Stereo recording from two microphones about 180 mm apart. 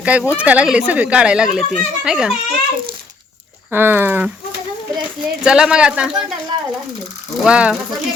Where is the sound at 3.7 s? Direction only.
10° right (ahead or behind).